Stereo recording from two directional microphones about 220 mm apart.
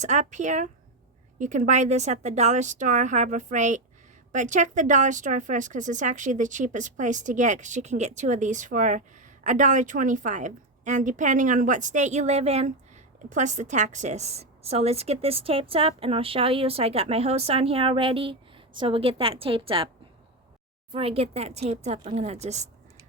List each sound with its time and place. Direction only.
0.0 s a woman's voice: 35° right (ahead or behind)
20.9 s a woman's voice: 25° right (ahead or behind)